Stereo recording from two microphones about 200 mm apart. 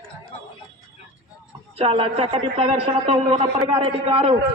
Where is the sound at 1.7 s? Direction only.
30° right (ahead or behind).